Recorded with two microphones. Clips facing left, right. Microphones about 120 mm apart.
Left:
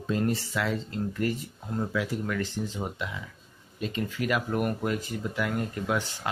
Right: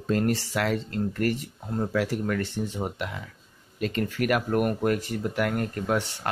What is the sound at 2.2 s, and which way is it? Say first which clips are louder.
Speech: right 3 dB; 55° right (ahead or behind).